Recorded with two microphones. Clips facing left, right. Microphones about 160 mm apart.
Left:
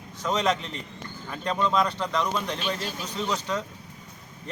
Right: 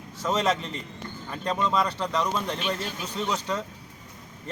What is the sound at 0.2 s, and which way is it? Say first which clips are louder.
A man's voice: even; 10° right (ahead or behind).